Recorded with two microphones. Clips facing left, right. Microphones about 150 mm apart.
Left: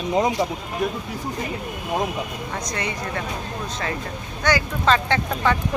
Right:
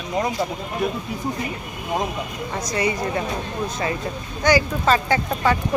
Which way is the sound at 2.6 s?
5° right (ahead or behind).